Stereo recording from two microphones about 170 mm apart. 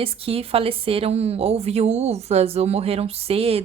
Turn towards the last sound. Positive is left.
turn(degrees=-35)  # may be behind; listen again after turning